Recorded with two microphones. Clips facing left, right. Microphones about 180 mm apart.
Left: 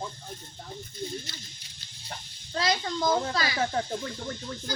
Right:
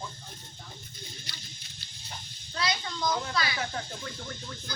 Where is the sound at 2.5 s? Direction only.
40° left (ahead or behind).